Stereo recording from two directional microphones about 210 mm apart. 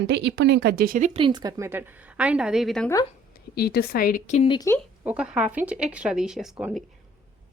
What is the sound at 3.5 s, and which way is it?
Speech, 50° left (ahead or behind).